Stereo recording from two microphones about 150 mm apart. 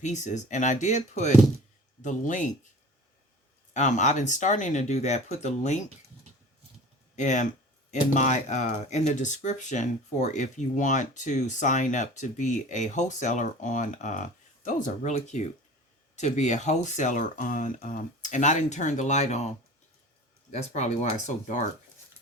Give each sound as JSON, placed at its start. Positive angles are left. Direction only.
{"t": 0.0, "sound": "speech", "side_deg": 55}
{"t": 3.8, "sound": "speech", "side_deg": 55}
{"t": 7.2, "sound": "speech", "side_deg": 55}
{"t": 20.5, "sound": "speech", "side_deg": 50}